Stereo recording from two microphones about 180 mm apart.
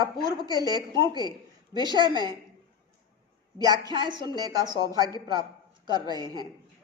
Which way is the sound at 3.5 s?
25° right (ahead or behind).